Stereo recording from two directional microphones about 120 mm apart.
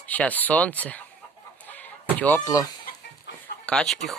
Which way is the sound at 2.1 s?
15° left (ahead or behind).